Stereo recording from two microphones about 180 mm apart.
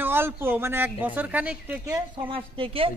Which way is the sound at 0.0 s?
10° right (ahead or behind).